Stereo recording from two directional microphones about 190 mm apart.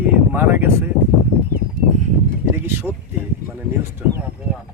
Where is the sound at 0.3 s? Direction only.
10° right (ahead or behind).